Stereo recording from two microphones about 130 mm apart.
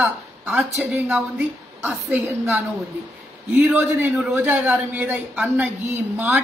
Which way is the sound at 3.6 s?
10° right (ahead or behind).